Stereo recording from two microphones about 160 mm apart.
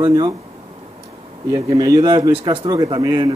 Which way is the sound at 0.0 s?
25° right (ahead or behind).